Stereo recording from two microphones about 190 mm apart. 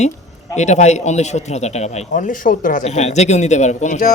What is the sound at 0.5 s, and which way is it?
A man's voice, 35° left (ahead or behind).